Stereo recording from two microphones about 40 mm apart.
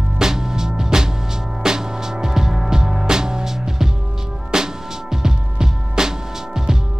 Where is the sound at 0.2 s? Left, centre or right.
Centre.